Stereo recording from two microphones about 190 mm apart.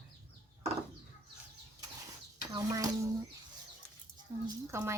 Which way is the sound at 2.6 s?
20° right (ahead or behind).